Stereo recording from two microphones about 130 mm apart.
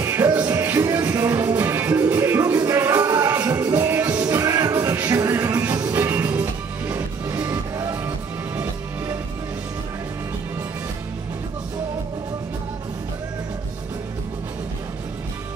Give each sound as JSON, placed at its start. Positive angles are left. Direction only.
{"t": 0.0, "sound": "music", "side_deg": -20}